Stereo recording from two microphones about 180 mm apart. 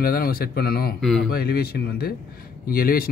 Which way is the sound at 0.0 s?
55° left (ahead or behind).